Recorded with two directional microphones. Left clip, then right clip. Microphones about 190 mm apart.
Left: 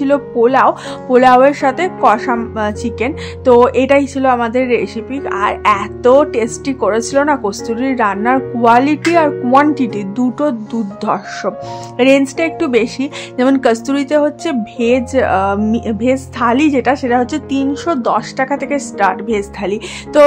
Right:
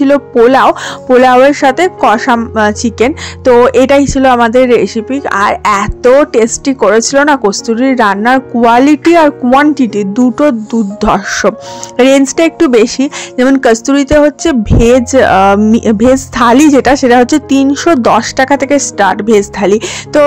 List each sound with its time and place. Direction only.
0.0 s a woman's voice: 35° right (ahead or behind)
11.1 s a woman's voice: 40° right (ahead or behind)